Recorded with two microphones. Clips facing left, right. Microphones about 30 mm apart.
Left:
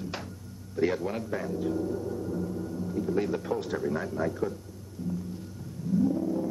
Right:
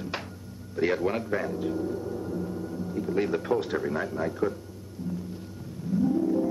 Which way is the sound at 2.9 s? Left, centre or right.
Right.